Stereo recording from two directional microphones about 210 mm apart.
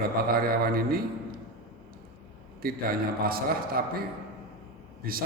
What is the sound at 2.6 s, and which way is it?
A man's voice, 45° right (ahead or behind).